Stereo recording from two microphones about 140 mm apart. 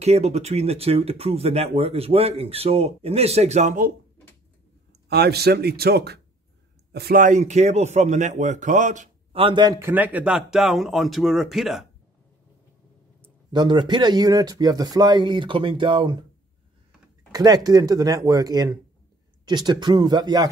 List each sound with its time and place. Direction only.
0.0 s speech: 50° right (ahead or behind)
5.6 s speech: 90° right
7.1 s speech: 70° right (ahead or behind)
9.3 s speech: 40° right (ahead or behind)
9.8 s speech: 15° right (ahead or behind)
13.5 s speech: 35° right (ahead or behind)
17.3 s speech: 25° right (ahead or behind)